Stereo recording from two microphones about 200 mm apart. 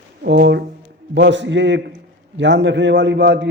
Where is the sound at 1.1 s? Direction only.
60° right (ahead or behind).